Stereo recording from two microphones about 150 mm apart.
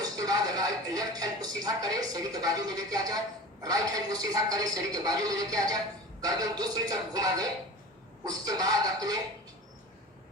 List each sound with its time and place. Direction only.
0.0 s a man's voice: 25° right (ahead or behind)